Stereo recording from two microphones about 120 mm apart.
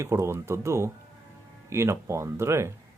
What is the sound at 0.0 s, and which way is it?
A man's voice, 20° right (ahead or behind).